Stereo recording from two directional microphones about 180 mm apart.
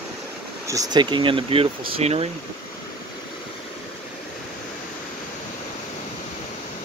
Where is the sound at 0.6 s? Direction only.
20° right (ahead or behind).